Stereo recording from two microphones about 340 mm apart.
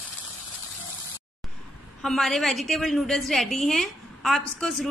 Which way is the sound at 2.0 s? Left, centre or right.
Centre.